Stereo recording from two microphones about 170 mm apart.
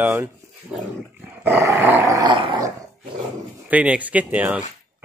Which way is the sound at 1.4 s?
15° right (ahead or behind).